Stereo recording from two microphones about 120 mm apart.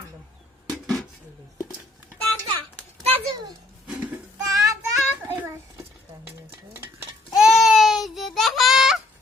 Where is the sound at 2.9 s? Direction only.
35° right (ahead or behind).